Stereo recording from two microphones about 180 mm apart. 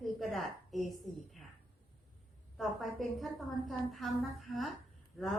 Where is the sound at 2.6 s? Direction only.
Centre (ahead or behind).